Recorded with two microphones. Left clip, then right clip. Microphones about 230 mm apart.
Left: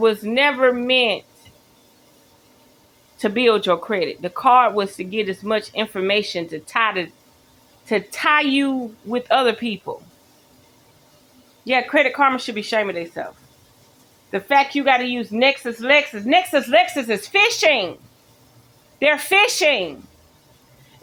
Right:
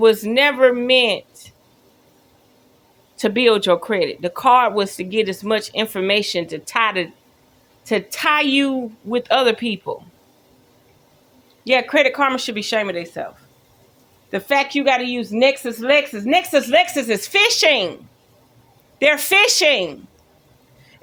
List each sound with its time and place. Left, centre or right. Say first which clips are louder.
0.0 s speech: right 3 dB; right
3.2 s speech: right 2 dB; right
11.6 s speech: right 2 dB; right
14.3 s speech: left 1 dB; right
18.9 s speech: right 1 dB; right